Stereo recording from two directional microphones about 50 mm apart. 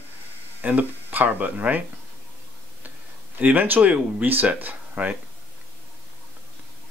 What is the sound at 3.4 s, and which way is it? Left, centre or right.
Speech, right.